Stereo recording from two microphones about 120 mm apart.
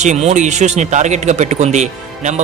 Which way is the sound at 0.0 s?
70° right (ahead or behind).